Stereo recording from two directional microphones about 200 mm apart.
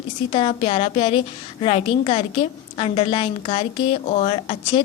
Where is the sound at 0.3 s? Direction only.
30° left (ahead or behind).